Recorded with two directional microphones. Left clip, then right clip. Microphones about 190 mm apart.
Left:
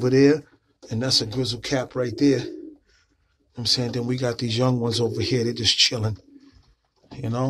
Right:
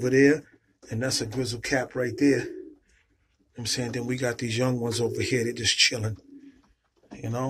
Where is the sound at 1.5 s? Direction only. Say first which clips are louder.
Even; 10° left (ahead or behind).